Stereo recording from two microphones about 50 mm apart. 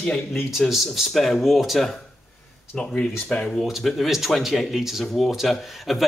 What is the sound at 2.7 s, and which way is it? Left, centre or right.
Speech, left.